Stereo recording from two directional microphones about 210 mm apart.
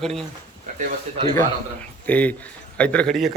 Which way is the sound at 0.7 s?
35° right (ahead or behind).